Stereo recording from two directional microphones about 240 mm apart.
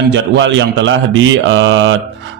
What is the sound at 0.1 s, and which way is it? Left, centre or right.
A man's voice, right.